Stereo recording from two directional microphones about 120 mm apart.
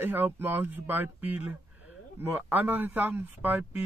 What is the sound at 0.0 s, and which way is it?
A man's voice, 15° right (ahead or behind).